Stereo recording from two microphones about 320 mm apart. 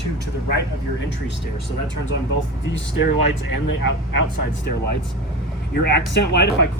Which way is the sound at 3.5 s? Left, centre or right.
Left.